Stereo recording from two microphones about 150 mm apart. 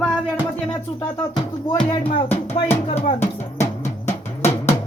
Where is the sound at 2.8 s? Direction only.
40° left (ahead or behind).